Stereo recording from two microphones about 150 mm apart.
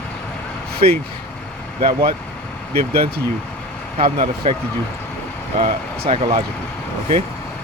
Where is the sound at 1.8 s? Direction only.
75° right (ahead or behind).